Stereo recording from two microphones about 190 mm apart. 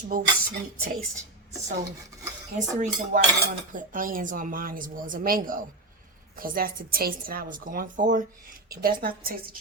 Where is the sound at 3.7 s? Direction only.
45° right (ahead or behind).